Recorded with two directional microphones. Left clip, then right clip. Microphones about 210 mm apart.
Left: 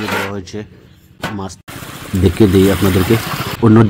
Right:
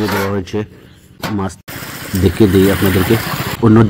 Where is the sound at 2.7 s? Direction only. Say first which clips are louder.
Even; 15° right (ahead or behind).